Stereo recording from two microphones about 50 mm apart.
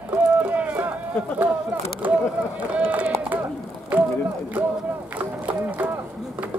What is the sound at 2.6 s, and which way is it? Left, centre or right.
Run, right.